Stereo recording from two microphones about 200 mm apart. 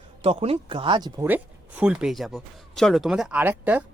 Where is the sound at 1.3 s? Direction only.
10° right (ahead or behind).